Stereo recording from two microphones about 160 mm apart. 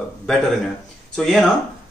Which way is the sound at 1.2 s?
Centre (ahead or behind).